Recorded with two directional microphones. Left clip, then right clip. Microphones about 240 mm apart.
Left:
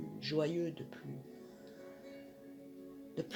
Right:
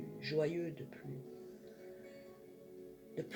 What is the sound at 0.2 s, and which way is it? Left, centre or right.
Speech, left.